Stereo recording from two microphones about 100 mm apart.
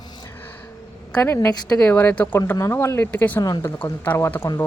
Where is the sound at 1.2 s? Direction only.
25° left (ahead or behind).